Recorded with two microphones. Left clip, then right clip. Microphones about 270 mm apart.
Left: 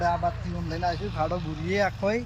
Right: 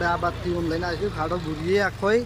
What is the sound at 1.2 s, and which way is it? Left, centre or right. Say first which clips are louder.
Speech: right 3 dB; centre.